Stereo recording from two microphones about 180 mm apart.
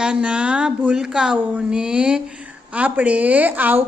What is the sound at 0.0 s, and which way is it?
Speech, 5° right (ahead or behind).